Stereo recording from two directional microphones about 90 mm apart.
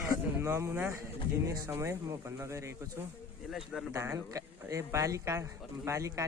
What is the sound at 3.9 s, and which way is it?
Speech, 35° right (ahead or behind).